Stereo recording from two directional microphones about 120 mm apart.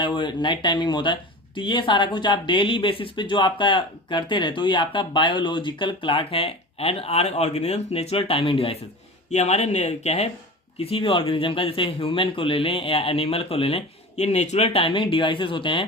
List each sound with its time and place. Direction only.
0.0 s speech: 40° left (ahead or behind)
9.3 s speech: 65° left (ahead or behind)
10.8 s speech: 50° left (ahead or behind)